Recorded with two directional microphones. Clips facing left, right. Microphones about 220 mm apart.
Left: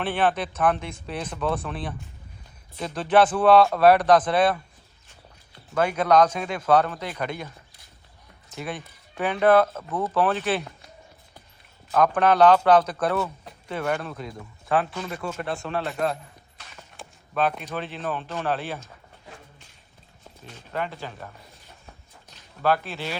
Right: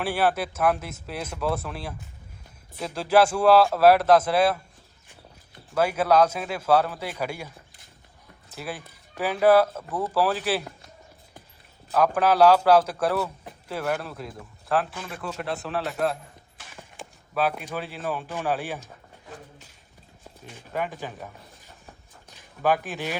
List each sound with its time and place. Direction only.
0.0 s speech: 10° right (ahead or behind)
5.7 s speech: 5° right (ahead or behind)
8.5 s speech: 5° right (ahead or behind)
11.9 s speech: 5° right (ahead or behind)
20.5 s speech: 10° right (ahead or behind)
22.6 s speech: 15° right (ahead or behind)